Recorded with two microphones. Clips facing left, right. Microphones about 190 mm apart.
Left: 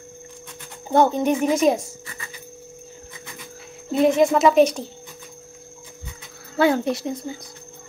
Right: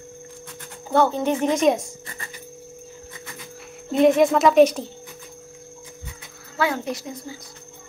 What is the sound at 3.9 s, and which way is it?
Speech, centre (ahead or behind).